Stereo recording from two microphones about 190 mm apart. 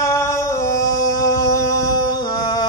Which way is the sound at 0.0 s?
15° left (ahead or behind).